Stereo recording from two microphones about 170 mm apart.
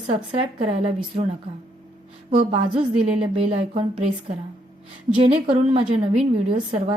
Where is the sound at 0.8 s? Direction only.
40° right (ahead or behind).